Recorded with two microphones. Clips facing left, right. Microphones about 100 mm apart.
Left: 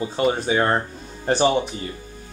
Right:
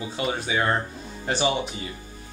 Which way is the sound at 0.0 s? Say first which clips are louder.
Left 7 dB; 40° left (ahead or behind).